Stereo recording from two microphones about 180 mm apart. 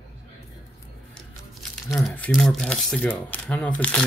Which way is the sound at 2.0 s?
5° left (ahead or behind).